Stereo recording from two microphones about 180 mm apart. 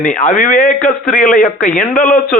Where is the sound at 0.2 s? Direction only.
45° left (ahead or behind).